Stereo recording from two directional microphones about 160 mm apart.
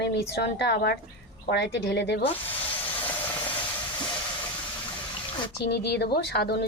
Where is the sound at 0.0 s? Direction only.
90° left.